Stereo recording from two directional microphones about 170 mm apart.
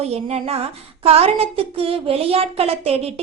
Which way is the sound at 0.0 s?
40° right (ahead or behind).